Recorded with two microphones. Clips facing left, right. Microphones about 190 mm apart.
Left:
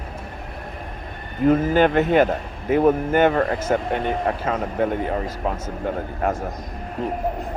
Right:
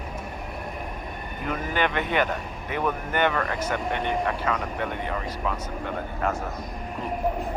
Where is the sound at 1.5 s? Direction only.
40° left (ahead or behind).